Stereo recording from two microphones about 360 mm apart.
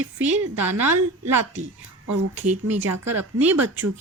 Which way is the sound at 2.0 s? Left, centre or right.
Right.